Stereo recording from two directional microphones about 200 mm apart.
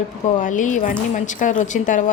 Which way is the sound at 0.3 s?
40° left (ahead or behind).